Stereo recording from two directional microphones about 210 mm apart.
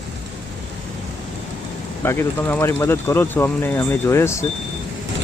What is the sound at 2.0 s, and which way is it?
Speech, 10° left (ahead or behind).